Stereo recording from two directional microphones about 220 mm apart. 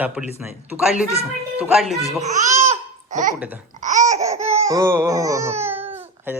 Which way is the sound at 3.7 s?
35° right (ahead or behind).